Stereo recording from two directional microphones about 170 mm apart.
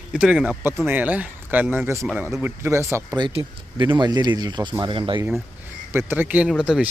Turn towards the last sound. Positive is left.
turn(degrees=-5)  # may be behind; listen again after turning